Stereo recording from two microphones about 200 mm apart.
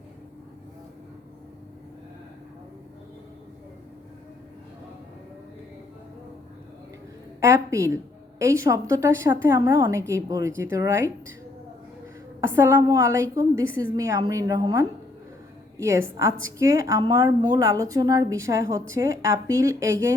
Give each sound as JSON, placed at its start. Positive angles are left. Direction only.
{"t": 7.4, "sound": "a woman's voice", "side_deg": -15}
{"t": 12.4, "sound": "a woman's voice", "side_deg": -10}